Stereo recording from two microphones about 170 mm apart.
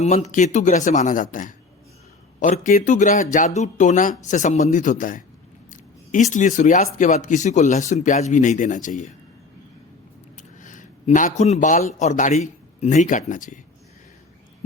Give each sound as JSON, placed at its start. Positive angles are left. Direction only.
{"t": 0.0, "sound": "speech", "side_deg": 40}
{"t": 5.7, "sound": "a sound", "side_deg": 50}
{"t": 6.3, "sound": "speech", "side_deg": 50}
{"t": 10.3, "sound": "speech", "side_deg": 50}